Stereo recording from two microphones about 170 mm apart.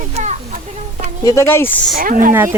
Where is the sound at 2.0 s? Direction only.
55° right (ahead or behind).